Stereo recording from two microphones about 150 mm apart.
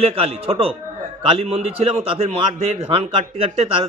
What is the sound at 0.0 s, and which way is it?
Speech, 40° right (ahead or behind).